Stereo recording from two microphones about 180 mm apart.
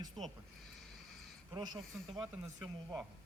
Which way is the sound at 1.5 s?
20° right (ahead or behind).